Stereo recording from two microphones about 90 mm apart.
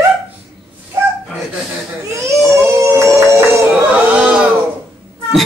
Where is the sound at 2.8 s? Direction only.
30° right (ahead or behind).